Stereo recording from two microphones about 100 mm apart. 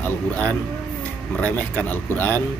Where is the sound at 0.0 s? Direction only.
20° left (ahead or behind).